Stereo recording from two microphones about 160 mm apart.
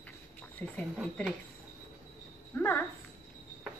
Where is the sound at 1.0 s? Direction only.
Centre (ahead or behind).